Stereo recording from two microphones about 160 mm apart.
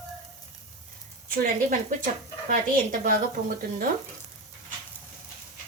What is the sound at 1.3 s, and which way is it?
Speech, 60° right (ahead or behind).